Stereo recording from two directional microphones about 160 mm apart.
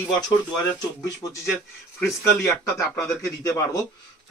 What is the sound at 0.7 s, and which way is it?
Speech, 20° left (ahead or behind).